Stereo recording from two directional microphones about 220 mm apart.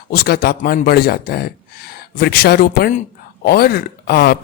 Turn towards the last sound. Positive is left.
turn(degrees=45)  # may be behind; listen again after turning